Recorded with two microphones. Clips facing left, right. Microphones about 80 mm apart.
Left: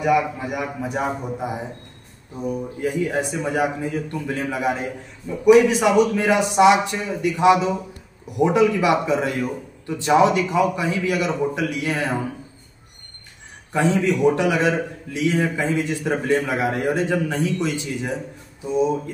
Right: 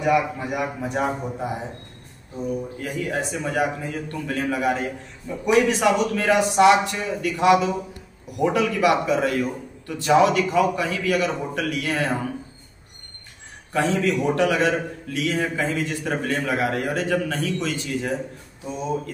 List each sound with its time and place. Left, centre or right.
0.0 s a man's voice: centre
2.8 s a man's voice: centre
13.7 s a man's voice: centre